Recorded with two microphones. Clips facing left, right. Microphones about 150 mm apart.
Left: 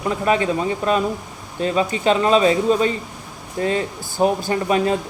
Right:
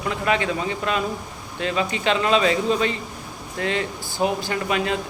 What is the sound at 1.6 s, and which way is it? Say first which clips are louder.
Speech: left 4 dB; 35° left (ahead or behind).